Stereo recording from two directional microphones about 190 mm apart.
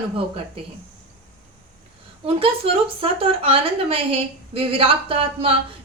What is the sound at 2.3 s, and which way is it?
A woman's voice, 30° right (ahead or behind).